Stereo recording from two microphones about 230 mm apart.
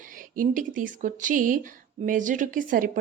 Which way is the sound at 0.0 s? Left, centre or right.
Right.